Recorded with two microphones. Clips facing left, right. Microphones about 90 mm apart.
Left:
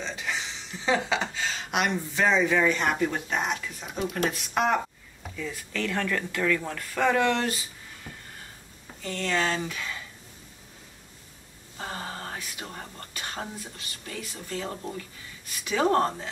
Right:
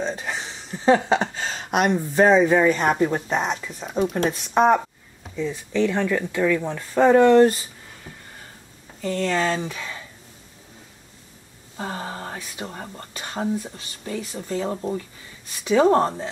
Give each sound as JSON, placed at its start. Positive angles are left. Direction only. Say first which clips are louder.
{"t": 0.0, "sound": "speech", "louder": "right 5 dB", "side_deg": -40}
{"t": 5.3, "sound": "speech", "louder": "right 9 dB", "side_deg": -20}
{"t": 9.0, "sound": "speech", "louder": "right 5 dB", "side_deg": -35}
{"t": 11.7, "sound": "speech", "louder": "right 5 dB", "side_deg": -25}